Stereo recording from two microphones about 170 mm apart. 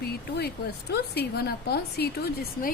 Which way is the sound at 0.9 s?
70° left (ahead or behind).